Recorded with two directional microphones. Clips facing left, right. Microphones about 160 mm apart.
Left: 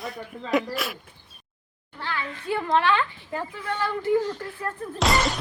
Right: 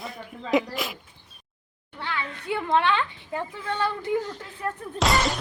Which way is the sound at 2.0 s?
20° right (ahead or behind).